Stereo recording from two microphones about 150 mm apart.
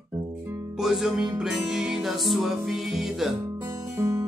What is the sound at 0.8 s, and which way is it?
Music, 5° right (ahead or behind).